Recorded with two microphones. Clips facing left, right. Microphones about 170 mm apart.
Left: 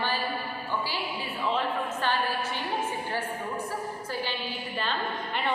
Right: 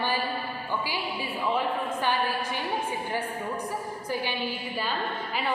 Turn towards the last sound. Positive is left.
turn(degrees=-15)  # may be behind; listen again after turning